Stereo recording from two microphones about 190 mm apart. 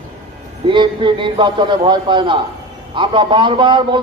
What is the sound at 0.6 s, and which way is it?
A man's voice, 25° right (ahead or behind).